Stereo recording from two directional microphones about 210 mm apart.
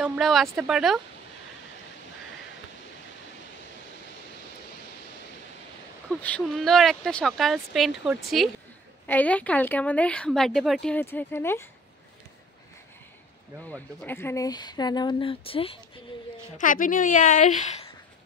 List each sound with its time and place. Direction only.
0.0 s speech: centre (ahead or behind)
6.2 s a woman's voice: 5° left (ahead or behind)
13.7 s speech: 10° left (ahead or behind); by 15.8 s 25° left (ahead or behind)
16.5 s a woman's voice: 40° left (ahead or behind)